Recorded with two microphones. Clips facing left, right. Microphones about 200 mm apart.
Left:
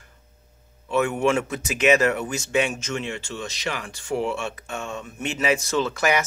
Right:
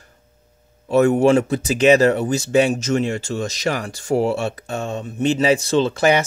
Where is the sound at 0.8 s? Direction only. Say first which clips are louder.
Right 7 dB; 40° right (ahead or behind).